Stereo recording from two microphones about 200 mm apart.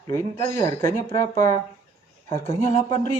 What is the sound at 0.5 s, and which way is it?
Speech, 15° left (ahead or behind).